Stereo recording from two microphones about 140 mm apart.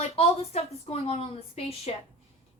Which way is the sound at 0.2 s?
45° left (ahead or behind).